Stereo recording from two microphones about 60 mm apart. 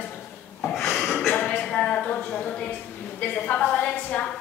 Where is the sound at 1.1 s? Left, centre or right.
Left.